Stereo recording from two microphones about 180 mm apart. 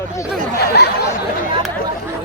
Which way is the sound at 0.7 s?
65° left (ahead or behind).